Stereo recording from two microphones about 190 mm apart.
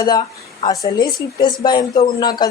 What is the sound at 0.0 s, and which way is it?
Speech, 20° left (ahead or behind).